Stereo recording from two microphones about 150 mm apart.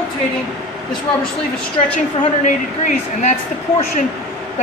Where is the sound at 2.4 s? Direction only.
55° left (ahead or behind).